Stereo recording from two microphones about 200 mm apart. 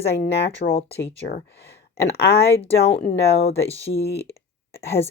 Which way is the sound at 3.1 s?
30° left (ahead or behind).